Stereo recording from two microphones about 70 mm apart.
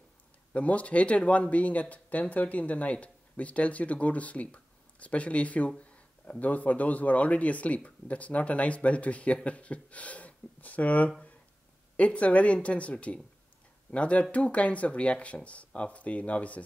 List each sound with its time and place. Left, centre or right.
0.5 s speech: centre
5.8 s a sound: centre
6.4 s speech: left